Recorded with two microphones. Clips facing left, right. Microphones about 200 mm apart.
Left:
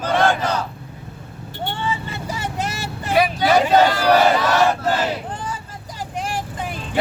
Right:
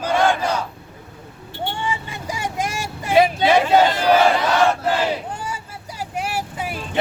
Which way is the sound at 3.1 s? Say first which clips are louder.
Right 2 dB; 25° right (ahead or behind).